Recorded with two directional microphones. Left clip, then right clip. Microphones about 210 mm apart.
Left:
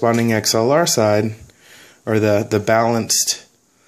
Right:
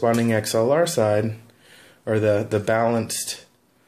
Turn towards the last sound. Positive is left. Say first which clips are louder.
# left 7 dB
turn(degrees=25)  # may be behind; listen again after turning